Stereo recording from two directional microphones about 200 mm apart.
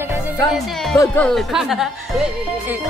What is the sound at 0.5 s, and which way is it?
Speech, centre (ahead or behind).